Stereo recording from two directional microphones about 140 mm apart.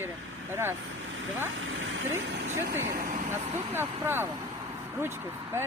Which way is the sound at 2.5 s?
90° right.